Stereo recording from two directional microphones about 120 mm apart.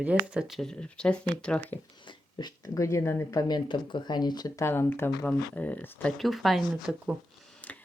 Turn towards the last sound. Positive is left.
turn(degrees=10)  # may be behind; listen again after turning